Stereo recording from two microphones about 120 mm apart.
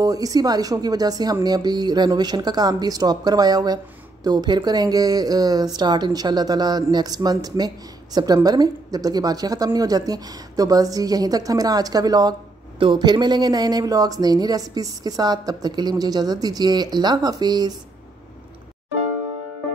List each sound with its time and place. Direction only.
0.0 s speech: 30° right (ahead or behind)
12.7 s speech: 45° right (ahead or behind)